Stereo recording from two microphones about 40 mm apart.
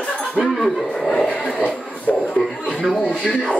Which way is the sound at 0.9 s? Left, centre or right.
Centre.